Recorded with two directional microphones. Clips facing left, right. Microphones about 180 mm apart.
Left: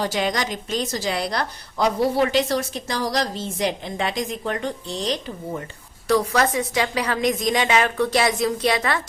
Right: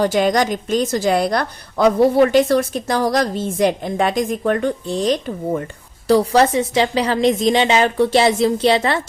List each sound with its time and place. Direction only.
0.0 s a woman's voice: 50° right (ahead or behind)
6.1 s a woman's voice: 30° right (ahead or behind)